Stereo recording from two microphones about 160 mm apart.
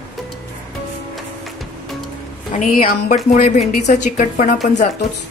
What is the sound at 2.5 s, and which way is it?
Speech, 55° left (ahead or behind).